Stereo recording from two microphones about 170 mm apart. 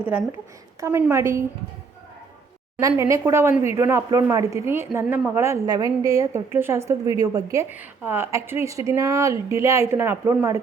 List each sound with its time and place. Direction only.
0.0 s a woman's voice: 10° right (ahead or behind)
2.7 s a woman's voice: 15° right (ahead or behind)